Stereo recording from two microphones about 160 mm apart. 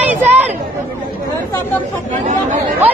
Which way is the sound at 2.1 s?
50° right (ahead or behind).